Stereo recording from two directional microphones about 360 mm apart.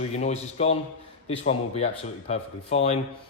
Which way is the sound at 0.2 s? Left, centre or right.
Centre.